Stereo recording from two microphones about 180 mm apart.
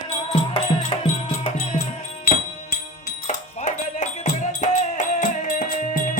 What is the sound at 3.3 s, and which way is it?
Music, 40° left (ahead or behind).